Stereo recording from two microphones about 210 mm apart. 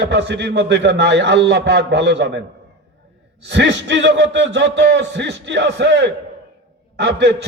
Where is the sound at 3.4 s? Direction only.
55° right (ahead or behind).